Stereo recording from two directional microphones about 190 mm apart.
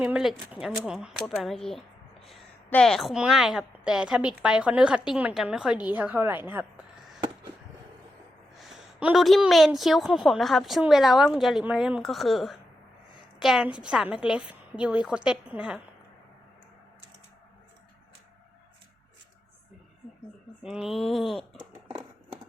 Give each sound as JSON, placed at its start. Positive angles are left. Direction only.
{"t": 0.0, "sound": "a woman's voice", "side_deg": -5}
{"t": 8.5, "sound": "a woman's voice", "side_deg": 0}
{"t": 20.6, "sound": "a woman's voice", "side_deg": 0}
{"t": 21.8, "sound": "scissors", "side_deg": -15}